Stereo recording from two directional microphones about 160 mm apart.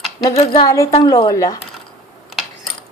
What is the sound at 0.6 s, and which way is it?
Speech, 20° left (ahead or behind).